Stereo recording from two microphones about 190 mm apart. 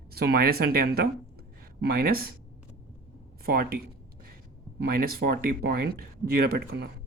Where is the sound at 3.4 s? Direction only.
55° right (ahead or behind).